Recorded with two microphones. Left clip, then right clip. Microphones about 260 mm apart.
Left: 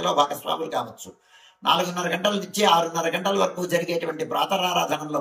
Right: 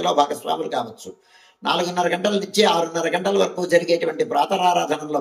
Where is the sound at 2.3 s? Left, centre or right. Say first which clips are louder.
Right 3 dB; right.